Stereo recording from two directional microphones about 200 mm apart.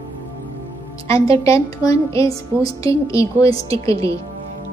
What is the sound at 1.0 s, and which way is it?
A woman's voice, 15° left (ahead or behind).